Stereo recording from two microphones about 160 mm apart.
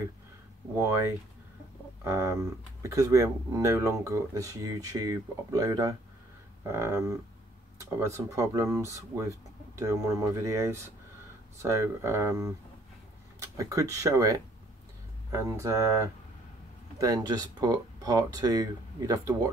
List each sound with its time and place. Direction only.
0.7 s speech: 15° right (ahead or behind)
2.0 s speech: 20° right (ahead or behind)